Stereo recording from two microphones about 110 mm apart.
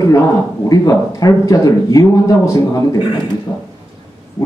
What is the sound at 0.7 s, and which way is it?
A man's voice, 30° left (ahead or behind).